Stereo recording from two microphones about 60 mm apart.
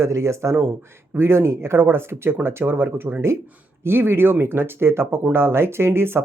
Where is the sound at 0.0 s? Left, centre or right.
Right.